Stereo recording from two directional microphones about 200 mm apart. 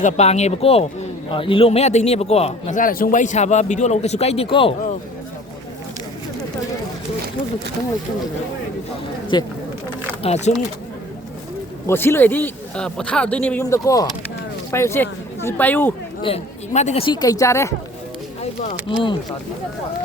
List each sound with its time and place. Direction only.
0.0 s a man's voice: 35° left (ahead or behind)
9.3 s speech: 20° left (ahead or behind)
10.2 s a man's voice: 35° left (ahead or behind)
11.9 s speech: 10° left (ahead or behind)
16.2 s speech: 30° left (ahead or behind); by 17.7 s 15° left (ahead or behind)
18.9 s speech: 25° left (ahead or behind)